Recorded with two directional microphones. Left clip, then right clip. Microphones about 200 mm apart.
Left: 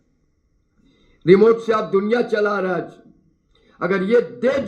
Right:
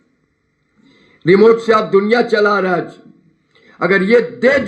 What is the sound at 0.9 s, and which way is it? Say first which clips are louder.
A man's voice: right 2 dB; 25° right (ahead or behind).